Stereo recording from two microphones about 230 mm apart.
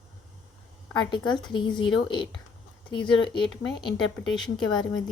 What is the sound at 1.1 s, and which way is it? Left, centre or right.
A woman's voice, centre.